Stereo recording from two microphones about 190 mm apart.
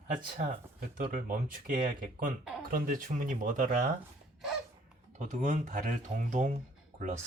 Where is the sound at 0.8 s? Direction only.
45° right (ahead or behind).